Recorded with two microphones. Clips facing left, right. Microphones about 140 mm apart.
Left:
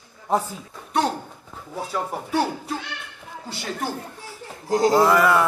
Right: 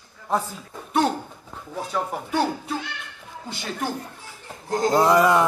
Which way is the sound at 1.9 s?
Centre (ahead or behind).